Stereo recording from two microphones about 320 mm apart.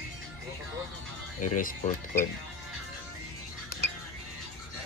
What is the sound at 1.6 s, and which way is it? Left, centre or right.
Speech, left.